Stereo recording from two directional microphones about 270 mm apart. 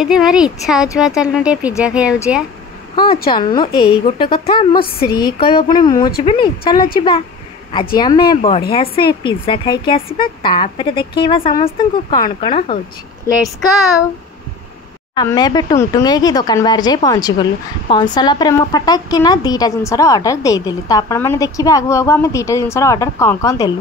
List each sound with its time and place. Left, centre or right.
0.0 s speech: centre
3.3 s a woman's voice: centre
4.8 s speech: left
5.2 s a woman's voice: centre
15.1 s a woman's voice: centre